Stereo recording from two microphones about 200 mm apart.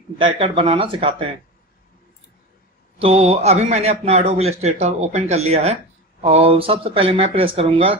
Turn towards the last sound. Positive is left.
turn(degrees=-30)  # may be behind; listen again after turning